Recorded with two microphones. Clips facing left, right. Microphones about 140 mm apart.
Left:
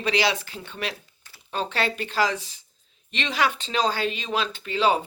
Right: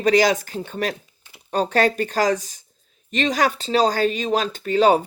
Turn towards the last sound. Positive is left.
turn(degrees=-45)  # may be behind; listen again after turning